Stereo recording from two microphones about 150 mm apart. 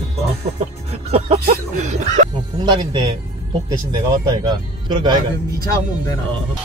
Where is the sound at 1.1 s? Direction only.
45° right (ahead or behind).